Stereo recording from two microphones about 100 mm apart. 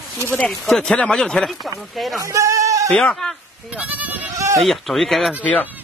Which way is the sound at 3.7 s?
15° right (ahead or behind).